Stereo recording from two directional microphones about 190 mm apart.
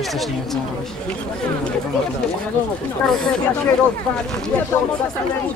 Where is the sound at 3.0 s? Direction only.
5° left (ahead or behind).